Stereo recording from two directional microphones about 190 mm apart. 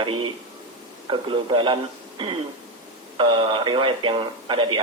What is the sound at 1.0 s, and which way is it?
A man's voice, 25° right (ahead or behind).